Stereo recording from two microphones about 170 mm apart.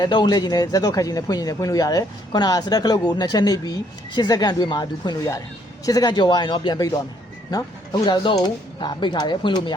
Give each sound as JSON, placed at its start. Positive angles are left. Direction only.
{"t": 0.0, "sound": "speech", "side_deg": 25}